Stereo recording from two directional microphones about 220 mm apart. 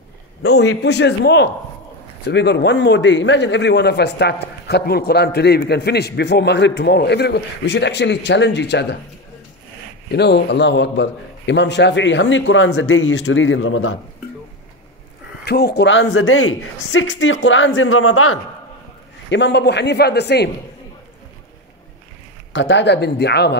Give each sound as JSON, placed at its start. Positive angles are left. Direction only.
{"t": 0.4, "sound": "a man's voice", "side_deg": 50}
{"t": 10.1, "sound": "a man's voice", "side_deg": 50}
{"t": 15.4, "sound": "a man's voice", "side_deg": 45}
{"t": 19.2, "sound": "a man's voice", "side_deg": 55}
{"t": 22.5, "sound": "a man's voice", "side_deg": 55}